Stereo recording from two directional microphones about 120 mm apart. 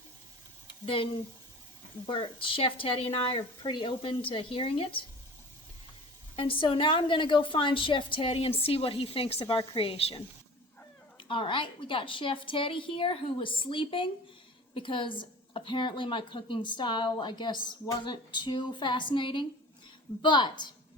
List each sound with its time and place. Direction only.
2.0 s a woman's voice: 45° left (ahead or behind)
6.3 s a woman's voice: 45° left (ahead or behind)
11.2 s a woman's voice: 45° left (ahead or behind)